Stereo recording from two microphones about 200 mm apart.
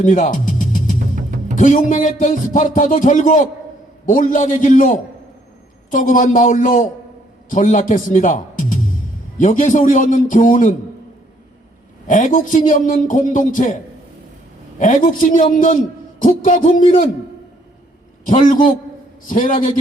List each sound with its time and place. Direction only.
0.0 s music: 40° left (ahead or behind)
1.5 s speech: 40° left (ahead or behind)
12.0 s speech: 40° left (ahead or behind)
14.8 s speech: 40° left (ahead or behind)
18.3 s a man's voice: 40° left (ahead or behind)